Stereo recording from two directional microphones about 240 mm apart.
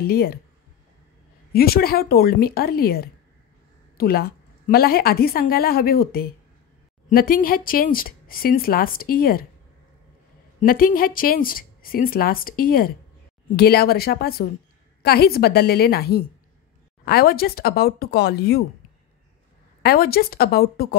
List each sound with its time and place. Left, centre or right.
0.0 s speech: left
1.5 s speech: left
10.6 s speech: left
19.8 s speech: left